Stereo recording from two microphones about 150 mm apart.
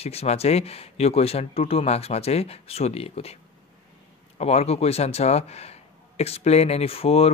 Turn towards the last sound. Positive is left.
turn(degrees=40)  # may be behind; listen again after turning